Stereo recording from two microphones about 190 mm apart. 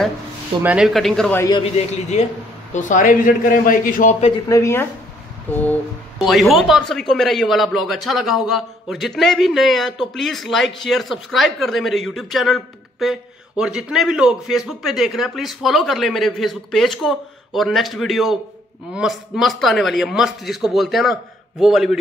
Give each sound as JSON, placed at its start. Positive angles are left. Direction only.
{"t": 0.6, "sound": "a man's voice", "side_deg": -5}
{"t": 1.6, "sound": "a man's voice", "side_deg": 35}
{"t": 4.5, "sound": "a man's voice", "side_deg": 15}